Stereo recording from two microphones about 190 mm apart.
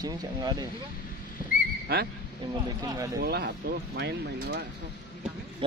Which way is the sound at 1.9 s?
55° right (ahead or behind).